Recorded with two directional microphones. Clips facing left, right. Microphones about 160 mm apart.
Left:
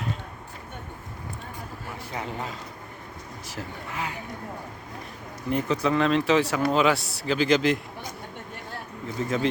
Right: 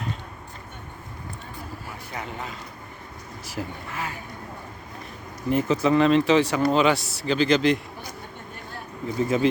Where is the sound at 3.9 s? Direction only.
15° left (ahead or behind).